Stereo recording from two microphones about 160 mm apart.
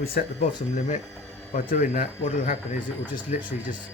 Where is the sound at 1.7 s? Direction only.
45° left (ahead or behind).